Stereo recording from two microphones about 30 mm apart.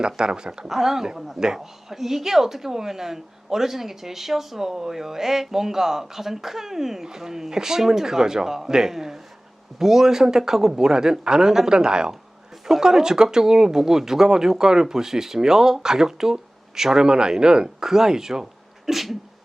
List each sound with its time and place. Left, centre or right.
0.0 s speech: right
0.7 s a woman's voice: centre
1.9 s a woman's voice: centre; by 17.8 s right
17.8 s a woman's voice: centre
18.9 s sneeze: centre